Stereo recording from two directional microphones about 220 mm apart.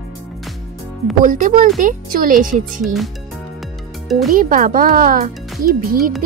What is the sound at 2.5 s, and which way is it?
Speech, centre (ahead or behind).